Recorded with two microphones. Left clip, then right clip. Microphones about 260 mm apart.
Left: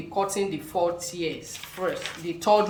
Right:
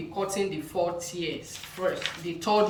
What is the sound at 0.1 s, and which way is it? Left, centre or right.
Speech, left.